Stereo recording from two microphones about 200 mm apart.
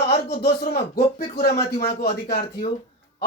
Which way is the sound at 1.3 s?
50° left (ahead or behind).